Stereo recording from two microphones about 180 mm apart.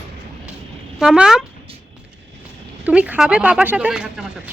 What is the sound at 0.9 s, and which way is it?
Speech, 5° right (ahead or behind).